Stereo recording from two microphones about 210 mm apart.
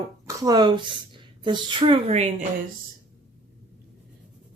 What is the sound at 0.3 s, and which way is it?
A woman's voice, 20° right (ahead or behind).